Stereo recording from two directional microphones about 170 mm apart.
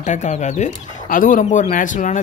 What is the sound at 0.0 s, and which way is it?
Speech, 45° left (ahead or behind).